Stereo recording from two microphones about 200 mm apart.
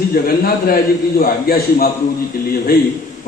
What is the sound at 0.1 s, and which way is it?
A man's voice, 45° left (ahead or behind).